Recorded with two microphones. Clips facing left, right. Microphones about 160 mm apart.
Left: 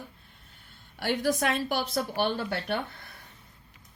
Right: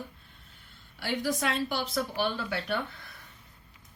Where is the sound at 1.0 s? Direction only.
60° left (ahead or behind).